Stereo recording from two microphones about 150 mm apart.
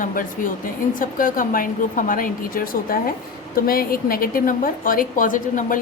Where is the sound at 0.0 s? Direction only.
65° left (ahead or behind).